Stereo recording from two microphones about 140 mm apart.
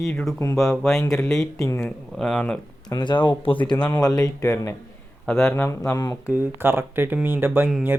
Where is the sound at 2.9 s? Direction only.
30° left (ahead or behind).